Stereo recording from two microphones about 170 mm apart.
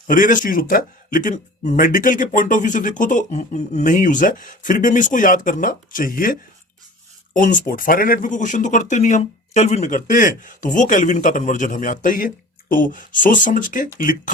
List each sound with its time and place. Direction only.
0.1 s speech: 50° left (ahead or behind)